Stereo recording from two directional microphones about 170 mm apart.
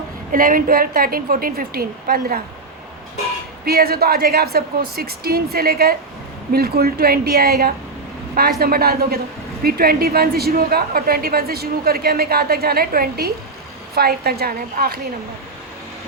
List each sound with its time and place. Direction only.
0.3 s a woman's voice: 55° right (ahead or behind)
3.7 s a woman's voice: 65° right (ahead or behind)